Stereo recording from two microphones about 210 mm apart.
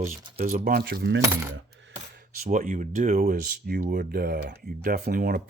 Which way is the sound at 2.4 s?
40° right (ahead or behind).